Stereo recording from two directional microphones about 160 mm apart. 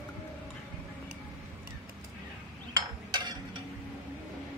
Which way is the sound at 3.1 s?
25° right (ahead or behind).